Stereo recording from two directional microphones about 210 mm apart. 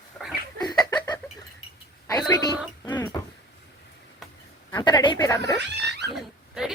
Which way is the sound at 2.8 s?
10° left (ahead or behind).